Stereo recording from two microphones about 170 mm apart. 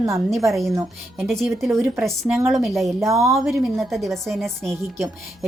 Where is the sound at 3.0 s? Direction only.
20° right (ahead or behind).